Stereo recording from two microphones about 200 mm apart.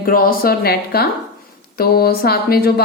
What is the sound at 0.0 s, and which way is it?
A woman's voice, 45° left (ahead or behind).